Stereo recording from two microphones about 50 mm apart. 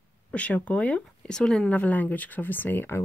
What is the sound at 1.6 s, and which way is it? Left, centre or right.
Speech, left.